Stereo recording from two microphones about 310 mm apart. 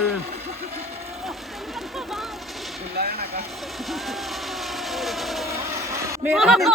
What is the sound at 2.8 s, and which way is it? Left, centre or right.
Vehicle, right.